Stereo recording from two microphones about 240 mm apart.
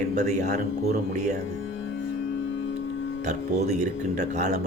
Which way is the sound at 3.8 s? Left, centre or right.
Right.